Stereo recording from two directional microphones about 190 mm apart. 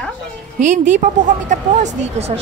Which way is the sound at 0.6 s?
40° right (ahead or behind).